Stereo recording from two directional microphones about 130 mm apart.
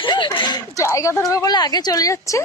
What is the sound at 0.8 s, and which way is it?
Speech, 20° left (ahead or behind).